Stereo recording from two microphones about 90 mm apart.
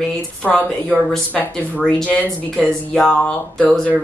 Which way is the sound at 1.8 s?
10° left (ahead or behind).